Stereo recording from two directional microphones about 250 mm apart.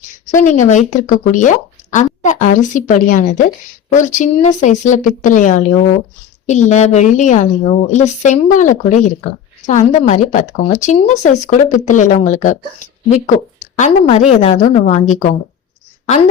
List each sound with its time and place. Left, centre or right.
0.1 s speech: left